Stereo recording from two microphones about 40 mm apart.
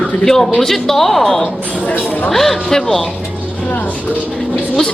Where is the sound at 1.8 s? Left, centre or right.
Left.